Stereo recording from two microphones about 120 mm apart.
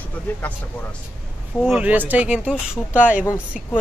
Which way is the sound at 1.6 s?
5° right (ahead or behind).